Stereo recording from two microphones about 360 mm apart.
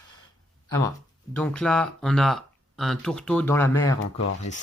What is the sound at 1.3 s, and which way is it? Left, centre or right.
Speech, centre.